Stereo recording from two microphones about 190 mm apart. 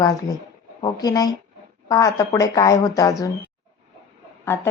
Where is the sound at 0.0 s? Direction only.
20° left (ahead or behind).